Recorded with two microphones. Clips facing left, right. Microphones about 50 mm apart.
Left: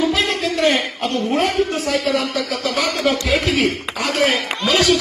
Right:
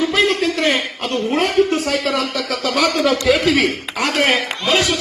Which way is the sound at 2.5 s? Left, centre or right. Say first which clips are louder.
Right 2 dB; right.